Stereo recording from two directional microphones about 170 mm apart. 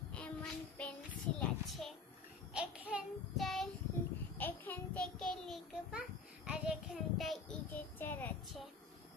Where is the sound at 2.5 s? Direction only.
5° right (ahead or behind); by 8.3 s 10° left (ahead or behind).